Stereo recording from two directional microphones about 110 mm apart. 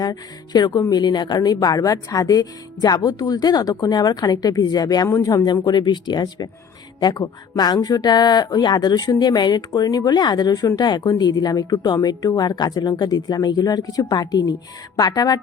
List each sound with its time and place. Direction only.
0.0 s speech: 35° left (ahead or behind)